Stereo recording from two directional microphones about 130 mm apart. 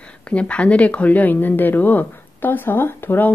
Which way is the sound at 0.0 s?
10° left (ahead or behind).